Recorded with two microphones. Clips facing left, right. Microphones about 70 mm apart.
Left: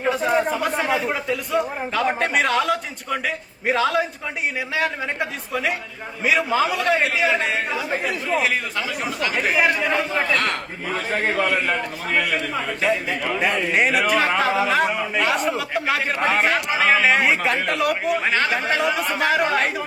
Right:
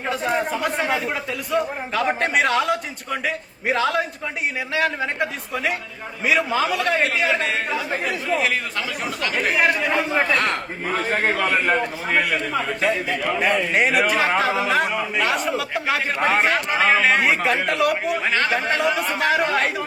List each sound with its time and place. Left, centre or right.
0.0 s a man's voice: centre
10.3 s a man's voice: right
12.2 s a man's voice: centre